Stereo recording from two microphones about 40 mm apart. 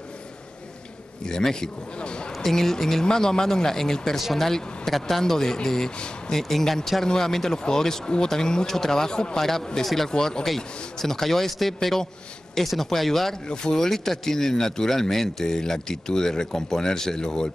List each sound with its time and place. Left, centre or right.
1.2 s speech: centre
2.3 s speech: centre; by 6.3 s left
6.3 s speech: centre
9.4 s speech: centre
13.5 s speech: centre
13.8 s speech: centre